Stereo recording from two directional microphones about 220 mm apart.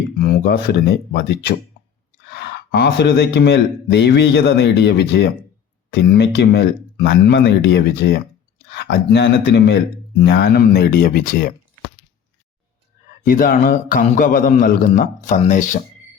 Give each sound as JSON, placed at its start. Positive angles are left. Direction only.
{"t": 0.2, "sound": "speech", "side_deg": 45}
{"t": 13.2, "sound": "a man's voice", "side_deg": 40}